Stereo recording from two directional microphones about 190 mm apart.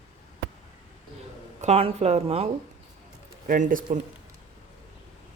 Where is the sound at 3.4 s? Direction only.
45° right (ahead or behind).